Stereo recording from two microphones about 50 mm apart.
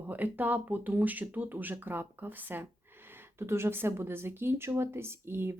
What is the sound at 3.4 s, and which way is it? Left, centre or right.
Speech, right.